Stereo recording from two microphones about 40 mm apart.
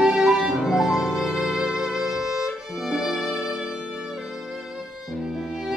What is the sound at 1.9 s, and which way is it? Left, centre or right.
Violin, centre.